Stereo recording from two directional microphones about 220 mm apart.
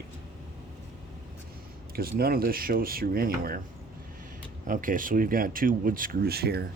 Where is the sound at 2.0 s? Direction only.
45° right (ahead or behind).